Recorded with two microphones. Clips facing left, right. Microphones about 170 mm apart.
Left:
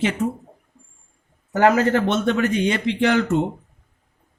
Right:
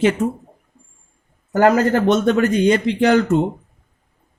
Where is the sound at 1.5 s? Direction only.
40° right (ahead or behind).